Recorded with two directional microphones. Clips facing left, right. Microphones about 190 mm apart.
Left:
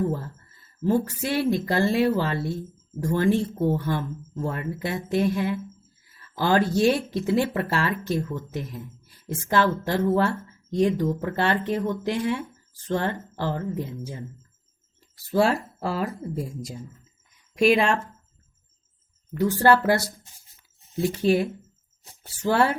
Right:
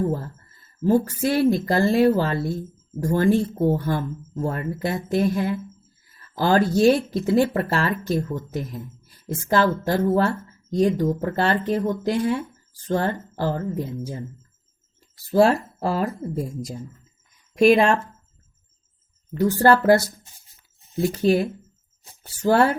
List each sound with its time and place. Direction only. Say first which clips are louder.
0.9 s speech: right 4 dB; 40° right (ahead or behind)
15.3 s speech: right 4 dB; 40° right (ahead or behind)
19.4 s speech: right 2 dB; 40° right (ahead or behind)